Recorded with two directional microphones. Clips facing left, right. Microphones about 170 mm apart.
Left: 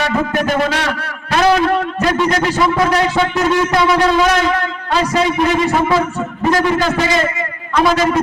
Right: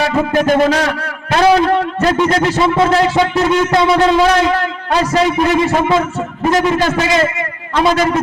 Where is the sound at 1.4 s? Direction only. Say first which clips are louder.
Right 2 dB; 30° right (ahead or behind).